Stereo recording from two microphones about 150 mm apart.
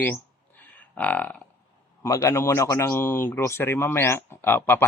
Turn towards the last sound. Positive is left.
turn(degrees=15)  # may be behind; listen again after turning